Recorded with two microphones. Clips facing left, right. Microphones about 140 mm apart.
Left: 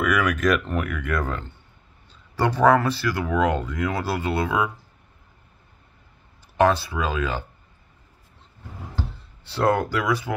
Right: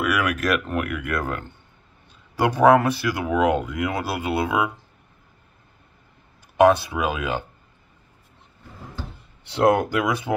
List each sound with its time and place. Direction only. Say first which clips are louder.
0.0 s speech: left 1 dB; 5° right (ahead or behind)
6.5 s speech: right 4 dB; 15° right (ahead or behind)
9.4 s speech: right 3 dB; 20° right (ahead or behind)